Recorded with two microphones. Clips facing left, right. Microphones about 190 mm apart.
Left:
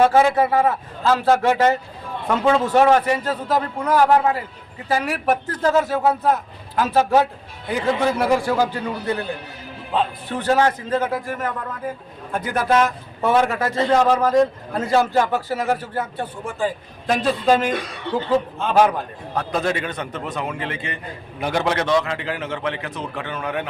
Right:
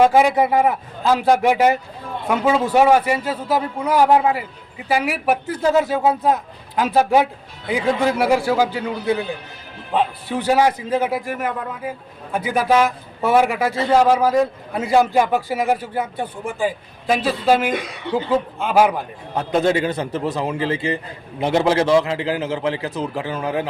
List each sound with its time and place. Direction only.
0.0 s a man's voice: 15° right (ahead or behind)
19.4 s a man's voice: 25° right (ahead or behind)